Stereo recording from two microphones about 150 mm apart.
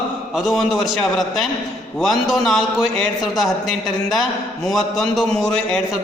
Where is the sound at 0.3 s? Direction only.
Centre (ahead or behind).